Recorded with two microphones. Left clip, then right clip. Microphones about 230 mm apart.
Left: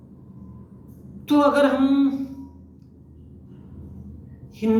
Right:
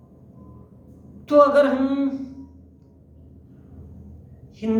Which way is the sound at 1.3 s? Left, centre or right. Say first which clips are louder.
Right 3 dB; centre.